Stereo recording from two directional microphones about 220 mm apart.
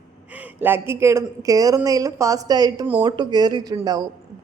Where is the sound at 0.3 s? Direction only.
10° right (ahead or behind).